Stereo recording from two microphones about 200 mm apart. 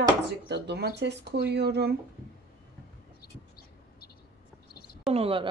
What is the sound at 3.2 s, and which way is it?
Bird, 50° left (ahead or behind).